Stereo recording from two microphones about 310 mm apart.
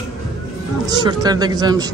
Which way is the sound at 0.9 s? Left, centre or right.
Centre.